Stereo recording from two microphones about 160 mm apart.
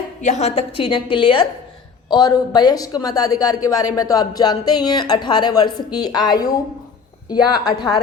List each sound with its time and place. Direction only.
0.2 s a woman's voice: 45° left (ahead or behind); by 7.9 s 25° left (ahead or behind)